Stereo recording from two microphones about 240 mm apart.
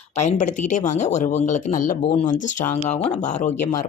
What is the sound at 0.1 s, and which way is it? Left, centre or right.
Speech, left.